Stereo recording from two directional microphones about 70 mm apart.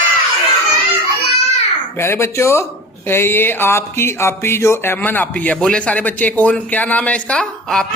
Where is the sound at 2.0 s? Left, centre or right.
Left.